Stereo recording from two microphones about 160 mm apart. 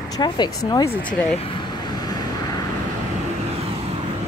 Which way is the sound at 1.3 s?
35° left (ahead or behind).